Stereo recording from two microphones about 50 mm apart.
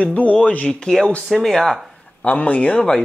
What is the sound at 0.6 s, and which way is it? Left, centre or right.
Speech, centre.